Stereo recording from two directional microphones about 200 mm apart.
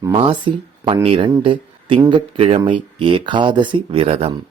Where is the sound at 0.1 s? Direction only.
25° right (ahead or behind).